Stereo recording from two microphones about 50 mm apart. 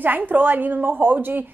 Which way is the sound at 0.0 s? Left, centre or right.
Right.